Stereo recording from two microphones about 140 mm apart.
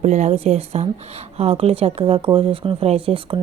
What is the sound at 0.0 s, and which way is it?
Speech, 55° right (ahead or behind).